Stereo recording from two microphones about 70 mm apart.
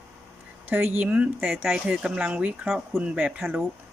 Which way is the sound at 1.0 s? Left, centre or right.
Centre.